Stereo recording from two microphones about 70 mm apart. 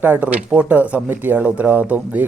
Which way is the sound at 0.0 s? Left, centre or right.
Right.